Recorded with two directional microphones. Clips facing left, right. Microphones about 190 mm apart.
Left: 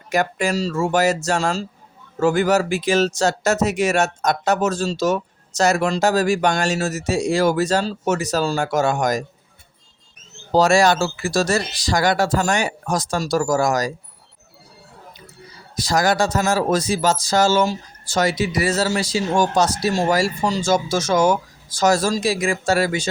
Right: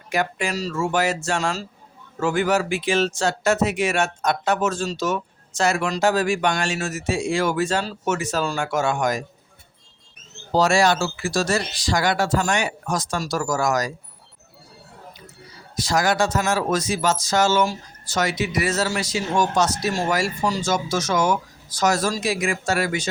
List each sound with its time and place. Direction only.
0.1 s speech: 40° left (ahead or behind)
10.5 s speech: 40° left (ahead or behind)
15.7 s speech: 35° left (ahead or behind)